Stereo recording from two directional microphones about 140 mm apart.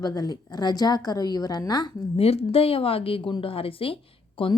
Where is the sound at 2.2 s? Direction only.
45° left (ahead or behind).